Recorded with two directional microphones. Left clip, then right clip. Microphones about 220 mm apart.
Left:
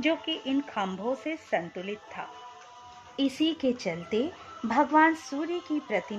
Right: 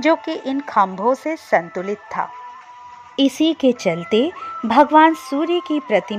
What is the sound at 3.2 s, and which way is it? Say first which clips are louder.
Speech: right 11 dB; 35° right (ahead or behind).